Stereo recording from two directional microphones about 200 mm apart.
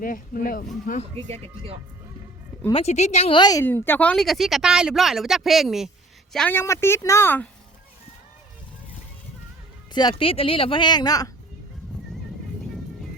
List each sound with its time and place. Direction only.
0.0 s speech: 45° left (ahead or behind)
1.1 s speech: 30° right (ahead or behind)
2.7 s speech: 35° left (ahead or behind); by 7.4 s 10° left (ahead or behind)
9.9 s speech: 20° left (ahead or behind)